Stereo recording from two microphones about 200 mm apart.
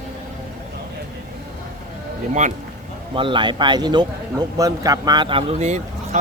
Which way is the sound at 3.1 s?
25° right (ahead or behind).